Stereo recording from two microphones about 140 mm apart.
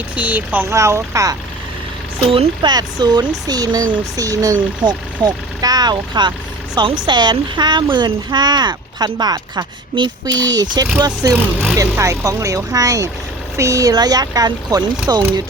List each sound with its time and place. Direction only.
0.2 s speech: 10° right (ahead or behind)
2.3 s a child's voice: 35° right (ahead or behind)
15.2 s speech: 20° right (ahead or behind)